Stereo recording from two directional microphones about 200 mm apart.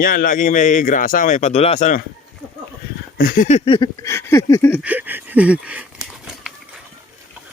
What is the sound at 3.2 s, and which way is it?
Speech, 45° left (ahead or behind).